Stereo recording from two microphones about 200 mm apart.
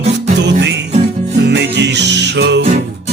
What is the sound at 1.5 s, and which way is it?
Music, 60° right (ahead or behind).